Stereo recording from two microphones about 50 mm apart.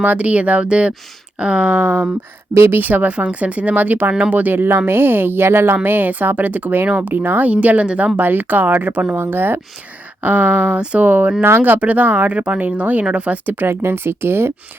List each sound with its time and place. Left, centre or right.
0.0 s speech: right
2.5 s a woman's voice: right
2.8 s a woman's voice: right
6.8 s speech: right
7.1 s speech: right
8.2 s a woman's voice: right
10.2 s speech: right
13.7 s a woman's voice: right